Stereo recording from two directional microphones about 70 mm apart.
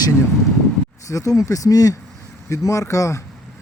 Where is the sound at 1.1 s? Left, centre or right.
Left.